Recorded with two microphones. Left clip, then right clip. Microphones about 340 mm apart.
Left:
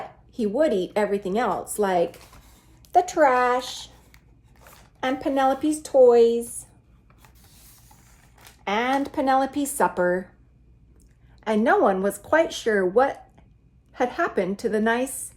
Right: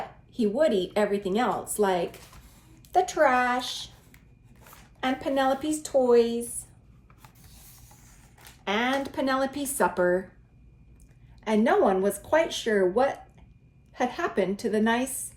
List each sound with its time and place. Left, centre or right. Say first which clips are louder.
0.3 s speech: left 2 dB; left
5.0 s speech: left 3 dB; left
7.2 s rub: even; centre
8.6 s speech: left 3 dB; left
11.4 s speech: left 3 dB; left